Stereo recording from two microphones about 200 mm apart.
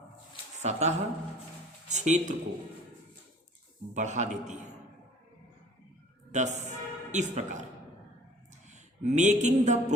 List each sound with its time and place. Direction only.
0.6 s a man's voice: 35° right (ahead or behind)
3.9 s a man's voice: 35° right (ahead or behind)
6.3 s speech: 35° right (ahead or behind)
8.7 s speech: 35° right (ahead or behind)